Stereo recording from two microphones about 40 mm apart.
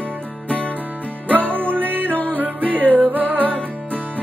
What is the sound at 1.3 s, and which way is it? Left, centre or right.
Music, right.